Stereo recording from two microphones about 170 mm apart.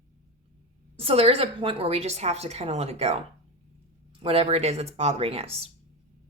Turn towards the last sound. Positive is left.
turn(degrees=-35)  # may be behind; listen again after turning